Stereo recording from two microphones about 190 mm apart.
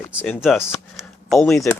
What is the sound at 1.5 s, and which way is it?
Speech, 15° left (ahead or behind).